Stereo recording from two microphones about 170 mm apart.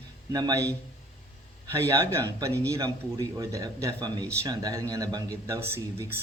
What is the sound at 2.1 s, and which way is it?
A man's voice, 15° right (ahead or behind).